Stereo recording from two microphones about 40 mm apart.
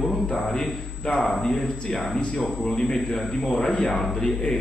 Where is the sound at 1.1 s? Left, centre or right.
Centre.